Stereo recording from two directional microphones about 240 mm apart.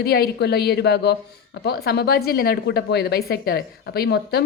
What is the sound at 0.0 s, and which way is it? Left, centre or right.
A woman's voice, left.